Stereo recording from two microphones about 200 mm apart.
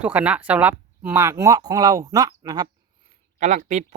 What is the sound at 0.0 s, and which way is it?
Speech, 10° right (ahead or behind).